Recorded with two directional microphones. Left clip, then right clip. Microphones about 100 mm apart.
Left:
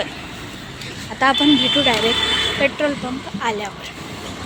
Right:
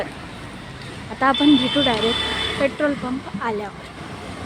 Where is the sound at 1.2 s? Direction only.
40° right (ahead or behind).